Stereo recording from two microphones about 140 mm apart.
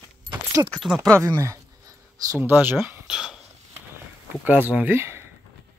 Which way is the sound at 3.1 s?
5° right (ahead or behind).